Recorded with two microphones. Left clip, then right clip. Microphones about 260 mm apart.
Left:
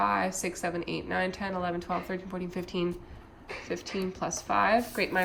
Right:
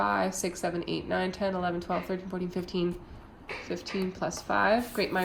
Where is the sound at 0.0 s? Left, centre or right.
Centre.